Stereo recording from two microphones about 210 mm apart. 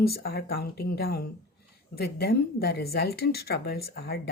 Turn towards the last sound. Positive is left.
turn(degrees=50)  # may be behind; listen again after turning